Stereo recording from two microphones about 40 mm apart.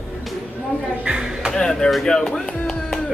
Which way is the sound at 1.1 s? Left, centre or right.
Centre.